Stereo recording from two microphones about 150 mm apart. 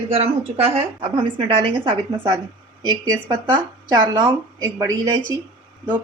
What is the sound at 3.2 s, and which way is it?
A woman's voice, 30° right (ahead or behind).